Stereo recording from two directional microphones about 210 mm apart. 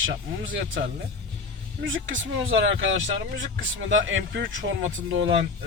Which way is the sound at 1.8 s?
65° right (ahead or behind).